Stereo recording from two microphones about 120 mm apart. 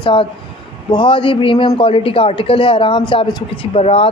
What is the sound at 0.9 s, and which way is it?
A woman's voice, 40° left (ahead or behind).